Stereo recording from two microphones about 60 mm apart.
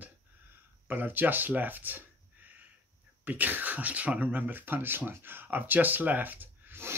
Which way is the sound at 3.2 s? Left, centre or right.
Right.